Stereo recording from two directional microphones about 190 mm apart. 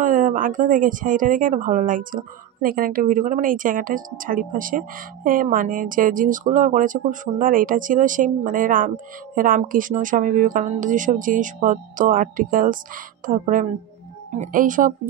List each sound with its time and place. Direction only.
0.0 s speech: 45° right (ahead or behind)